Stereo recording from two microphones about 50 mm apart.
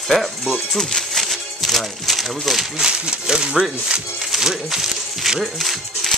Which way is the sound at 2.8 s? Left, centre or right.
Centre.